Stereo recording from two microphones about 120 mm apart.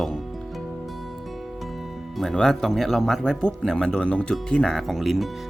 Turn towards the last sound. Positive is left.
turn(degrees=0)  # may be behind; listen again after turning